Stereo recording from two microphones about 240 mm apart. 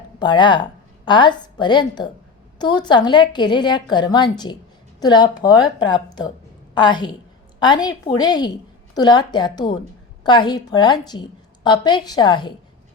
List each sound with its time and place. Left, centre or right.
0.2 s a woman's voice: centre